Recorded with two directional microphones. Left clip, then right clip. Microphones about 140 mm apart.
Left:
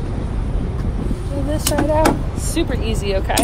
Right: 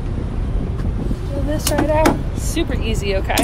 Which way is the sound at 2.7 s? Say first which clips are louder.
Even; 35° left (ahead or behind).